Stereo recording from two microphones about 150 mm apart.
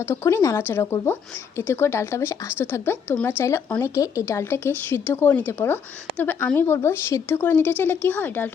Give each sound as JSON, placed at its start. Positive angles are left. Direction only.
{"t": 0.1, "sound": "a woman's voice", "side_deg": 20}